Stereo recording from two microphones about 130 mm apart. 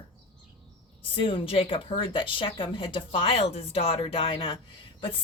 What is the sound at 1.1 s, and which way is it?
Speech, 40° left (ahead or behind).